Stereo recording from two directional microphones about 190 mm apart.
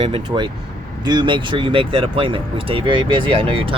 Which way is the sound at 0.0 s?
25° right (ahead or behind).